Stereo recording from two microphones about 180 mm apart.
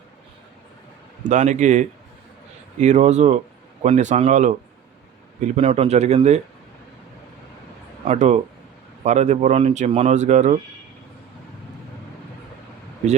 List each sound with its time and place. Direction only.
1.2 s speech: 45° right (ahead or behind)
8.0 s speech: 40° right (ahead or behind)